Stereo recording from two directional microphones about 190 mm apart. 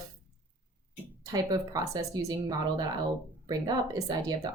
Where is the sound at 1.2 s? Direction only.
20° right (ahead or behind).